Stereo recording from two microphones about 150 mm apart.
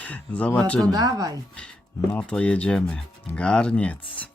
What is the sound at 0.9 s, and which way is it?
Speech, 25° right (ahead or behind).